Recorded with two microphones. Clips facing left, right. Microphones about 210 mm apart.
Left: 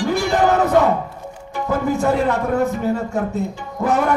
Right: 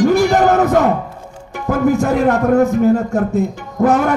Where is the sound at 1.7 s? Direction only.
50° right (ahead or behind).